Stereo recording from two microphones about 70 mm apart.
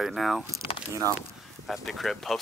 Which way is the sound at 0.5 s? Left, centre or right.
Right.